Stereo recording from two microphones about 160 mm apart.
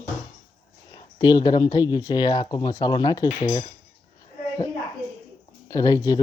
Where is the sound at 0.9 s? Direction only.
30° left (ahead or behind).